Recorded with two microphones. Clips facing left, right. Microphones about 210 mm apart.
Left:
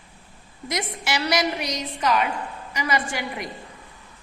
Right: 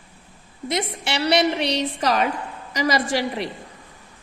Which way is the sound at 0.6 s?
25° right (ahead or behind).